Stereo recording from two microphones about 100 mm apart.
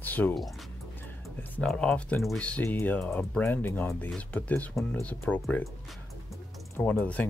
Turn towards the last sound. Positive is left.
turn(degrees=15)  # may be behind; listen again after turning